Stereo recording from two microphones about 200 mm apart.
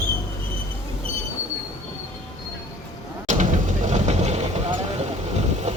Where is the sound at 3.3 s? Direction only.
40° right (ahead or behind).